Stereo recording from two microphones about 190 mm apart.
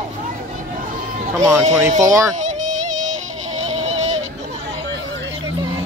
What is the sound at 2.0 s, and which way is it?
Speech, 15° right (ahead or behind).